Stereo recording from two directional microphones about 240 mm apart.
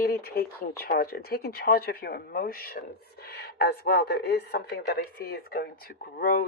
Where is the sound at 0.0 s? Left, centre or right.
Left.